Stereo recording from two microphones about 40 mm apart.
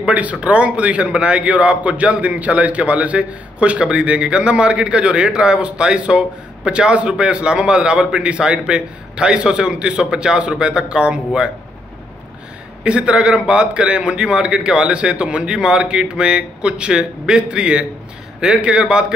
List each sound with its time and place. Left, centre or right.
0.0 s a man's voice: right
12.8 s a man's voice: right